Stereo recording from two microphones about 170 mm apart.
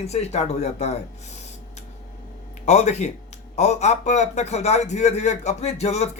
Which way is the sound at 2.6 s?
40° left (ahead or behind).